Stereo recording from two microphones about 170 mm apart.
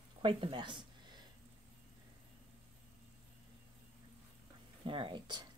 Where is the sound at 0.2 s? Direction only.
30° right (ahead or behind).